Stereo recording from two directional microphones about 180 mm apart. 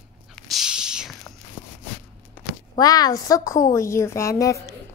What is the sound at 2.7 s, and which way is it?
A woman's voice, 20° left (ahead or behind).